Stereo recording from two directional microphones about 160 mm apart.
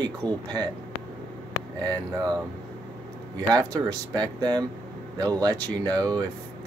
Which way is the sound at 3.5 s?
25° right (ahead or behind).